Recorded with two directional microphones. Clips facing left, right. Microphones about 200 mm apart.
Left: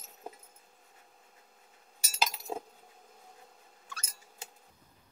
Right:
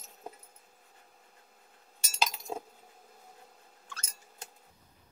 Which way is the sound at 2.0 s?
5° left (ahead or behind).